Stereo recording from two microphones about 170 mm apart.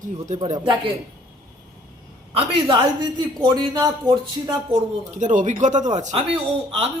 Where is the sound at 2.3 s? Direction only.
30° right (ahead or behind).